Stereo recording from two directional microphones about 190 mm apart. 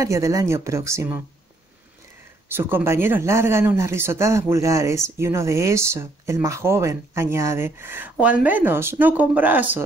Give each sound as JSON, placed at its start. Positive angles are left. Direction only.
{"t": 0.0, "sound": "speech", "side_deg": -15}
{"t": 2.5, "sound": "speech", "side_deg": -10}